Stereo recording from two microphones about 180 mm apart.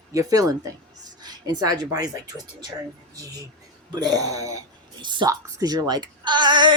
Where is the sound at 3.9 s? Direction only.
20° right (ahead or behind).